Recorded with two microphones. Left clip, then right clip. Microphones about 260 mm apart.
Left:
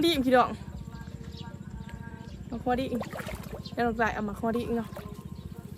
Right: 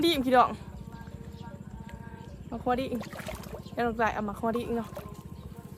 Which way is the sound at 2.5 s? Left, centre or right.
Centre.